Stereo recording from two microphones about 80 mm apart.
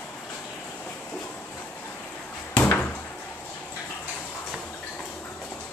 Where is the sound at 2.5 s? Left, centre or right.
Centre.